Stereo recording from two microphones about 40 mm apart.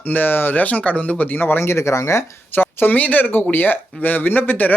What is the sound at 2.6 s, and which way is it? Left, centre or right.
Speech, left.